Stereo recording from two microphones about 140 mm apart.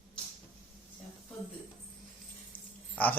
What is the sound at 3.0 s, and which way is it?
Speech, 10° left (ahead or behind).